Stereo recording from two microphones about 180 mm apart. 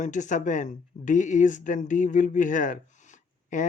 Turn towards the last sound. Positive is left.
turn(degrees=45)  # may be behind; listen again after turning